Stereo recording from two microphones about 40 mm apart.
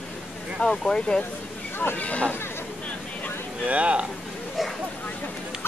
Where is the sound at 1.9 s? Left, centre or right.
Left.